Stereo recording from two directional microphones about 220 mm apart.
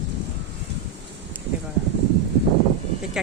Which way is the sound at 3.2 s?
5° right (ahead or behind).